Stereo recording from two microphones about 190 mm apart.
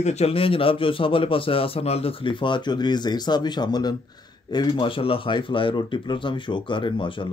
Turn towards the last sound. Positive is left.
turn(degrees=25)  # may be behind; listen again after turning